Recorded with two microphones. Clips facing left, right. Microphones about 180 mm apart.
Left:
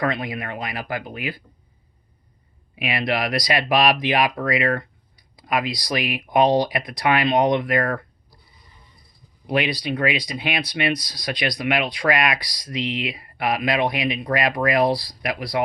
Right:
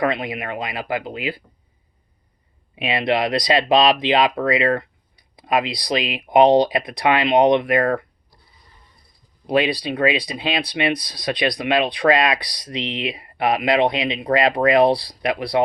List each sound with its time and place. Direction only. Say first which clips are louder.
0.0 s speech: right 3 dB; 25° right (ahead or behind)
2.7 s speech: right 4 dB; 25° right (ahead or behind)
9.5 s speech: right 3 dB; 30° right (ahead or behind)